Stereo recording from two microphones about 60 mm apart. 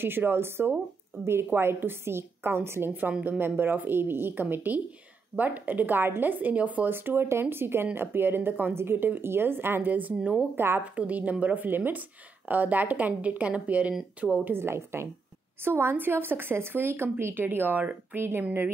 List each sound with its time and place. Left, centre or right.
0.0 s speech: right
10.5 s speech: right
10.8 s speech: right
14.5 s a woman's voice: right